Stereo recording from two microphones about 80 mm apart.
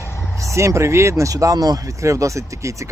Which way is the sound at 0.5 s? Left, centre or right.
Right.